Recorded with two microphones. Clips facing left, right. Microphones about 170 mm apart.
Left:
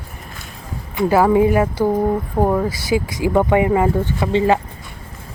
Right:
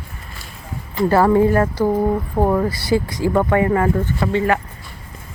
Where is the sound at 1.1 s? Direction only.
10° left (ahead or behind).